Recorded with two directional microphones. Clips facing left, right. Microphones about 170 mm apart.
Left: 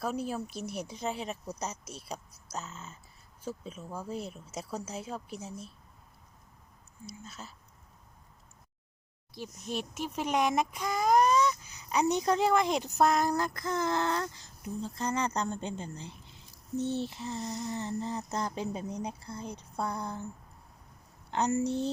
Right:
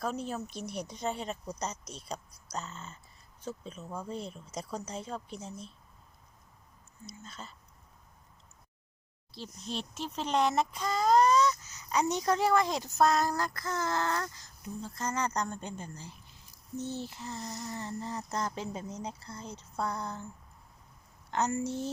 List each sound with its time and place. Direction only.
0.0 s a child's voice: 5° left (ahead or behind)
7.1 s speech: 5° left (ahead or behind)
9.3 s a child's voice: 15° left (ahead or behind)
21.2 s a woman's voice: 20° left (ahead or behind)